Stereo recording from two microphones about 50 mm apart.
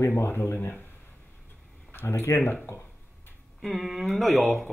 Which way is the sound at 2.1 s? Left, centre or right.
Left.